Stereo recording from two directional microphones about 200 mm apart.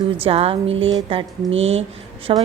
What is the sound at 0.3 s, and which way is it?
A woman's voice, 30° right (ahead or behind).